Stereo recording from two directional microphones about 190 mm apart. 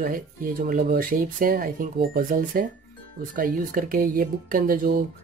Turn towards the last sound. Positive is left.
turn(degrees=-50)  # may be behind; listen again after turning